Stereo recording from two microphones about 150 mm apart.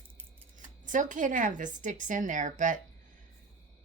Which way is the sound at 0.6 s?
60° right (ahead or behind).